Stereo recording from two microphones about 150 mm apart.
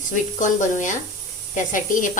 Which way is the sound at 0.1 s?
55° left (ahead or behind).